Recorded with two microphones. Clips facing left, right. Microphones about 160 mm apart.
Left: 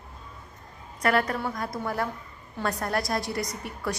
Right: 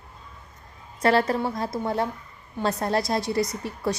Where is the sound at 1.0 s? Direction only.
30° right (ahead or behind).